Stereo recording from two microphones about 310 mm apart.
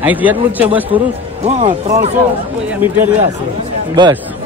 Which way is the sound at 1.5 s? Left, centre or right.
Right.